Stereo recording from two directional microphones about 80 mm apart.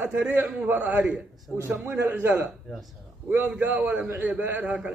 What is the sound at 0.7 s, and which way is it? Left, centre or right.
Speech, right.